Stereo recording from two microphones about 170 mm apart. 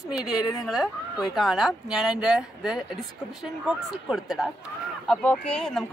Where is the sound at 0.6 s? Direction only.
5° right (ahead or behind).